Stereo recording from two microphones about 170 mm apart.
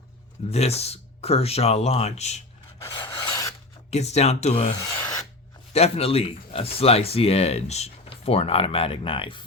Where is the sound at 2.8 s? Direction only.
25° left (ahead or behind).